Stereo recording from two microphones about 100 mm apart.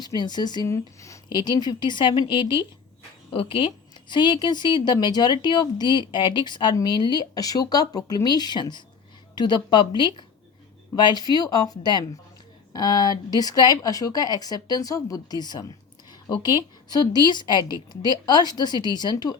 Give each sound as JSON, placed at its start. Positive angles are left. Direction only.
{"t": 0.0, "sound": "speech", "side_deg": 45}
{"t": 0.7, "sound": "a woman's voice", "side_deg": 30}
{"t": 1.3, "sound": "a woman's voice", "side_deg": 45}
{"t": 16.9, "sound": "a woman's voice", "side_deg": 40}